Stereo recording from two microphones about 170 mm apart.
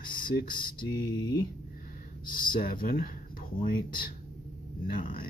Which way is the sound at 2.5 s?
55° left (ahead or behind).